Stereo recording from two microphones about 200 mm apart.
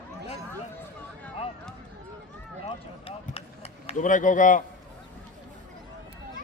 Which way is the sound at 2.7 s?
30° left (ahead or behind).